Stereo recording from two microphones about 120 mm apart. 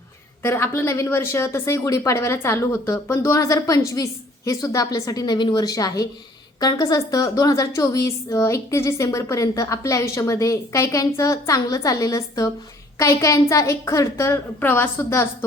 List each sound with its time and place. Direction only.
0.4 s a woman's voice: 20° left (ahead or behind)